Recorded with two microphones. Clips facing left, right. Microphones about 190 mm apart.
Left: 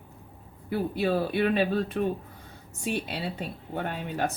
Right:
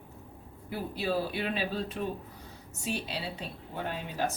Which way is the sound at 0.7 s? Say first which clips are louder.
Left 6 dB; 55° left (ahead or behind).